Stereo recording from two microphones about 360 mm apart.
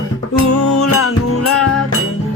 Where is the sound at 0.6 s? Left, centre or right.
Left.